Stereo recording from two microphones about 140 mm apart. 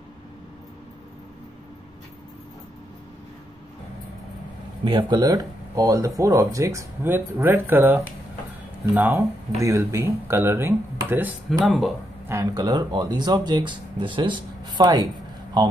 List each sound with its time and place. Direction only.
4.8 s speech: 35° right (ahead or behind); by 11.3 s 15° right (ahead or behind)
11.6 s speech: centre (ahead or behind)
12.3 s speech: 25° right (ahead or behind)